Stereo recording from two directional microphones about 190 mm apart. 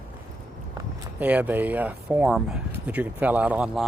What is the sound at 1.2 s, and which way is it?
Speech, 10° right (ahead or behind).